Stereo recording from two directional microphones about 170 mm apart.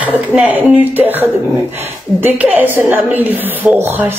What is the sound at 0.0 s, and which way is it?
Speech, 10° right (ahead or behind).